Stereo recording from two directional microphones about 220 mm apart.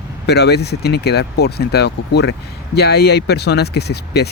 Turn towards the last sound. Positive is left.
turn(degrees=50)  # may be behind; listen again after turning